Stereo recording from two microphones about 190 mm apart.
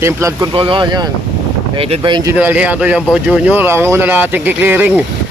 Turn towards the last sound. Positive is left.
turn(degrees=-10)  # may be behind; listen again after turning